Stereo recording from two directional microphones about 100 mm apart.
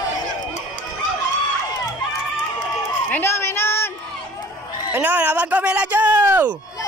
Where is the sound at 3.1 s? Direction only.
25° left (ahead or behind).